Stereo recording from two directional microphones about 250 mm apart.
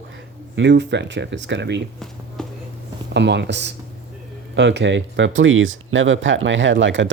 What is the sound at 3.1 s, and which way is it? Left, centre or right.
Speech, right.